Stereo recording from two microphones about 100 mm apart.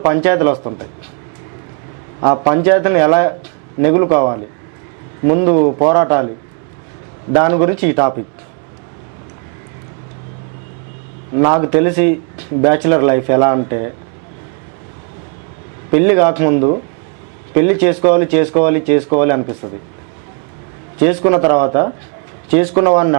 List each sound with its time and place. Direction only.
0.0 s speech: 15° right (ahead or behind)
2.2 s a man's voice: 20° right (ahead or behind)
7.3 s speech: 15° right (ahead or behind)
11.3 s speech: 20° right (ahead or behind)
15.9 s speech: 15° right (ahead or behind)
21.0 s speech: 15° right (ahead or behind)